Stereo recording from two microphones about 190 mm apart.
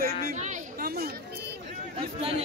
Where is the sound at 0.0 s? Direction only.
45° right (ahead or behind).